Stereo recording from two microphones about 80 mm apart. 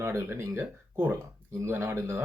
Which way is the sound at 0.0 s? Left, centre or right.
Right.